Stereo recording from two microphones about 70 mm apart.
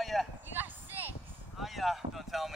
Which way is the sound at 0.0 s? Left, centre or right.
Centre.